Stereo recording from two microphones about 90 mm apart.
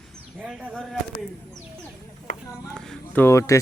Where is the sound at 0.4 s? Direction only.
Centre (ahead or behind).